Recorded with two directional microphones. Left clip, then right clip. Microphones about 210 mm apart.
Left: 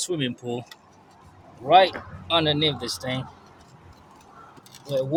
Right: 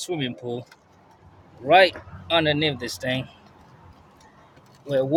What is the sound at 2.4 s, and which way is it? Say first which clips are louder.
Speech: even; 5° right (ahead or behind).